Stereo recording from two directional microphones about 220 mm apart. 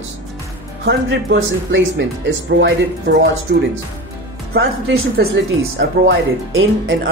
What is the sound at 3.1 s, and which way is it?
Speech, 45° right (ahead or behind).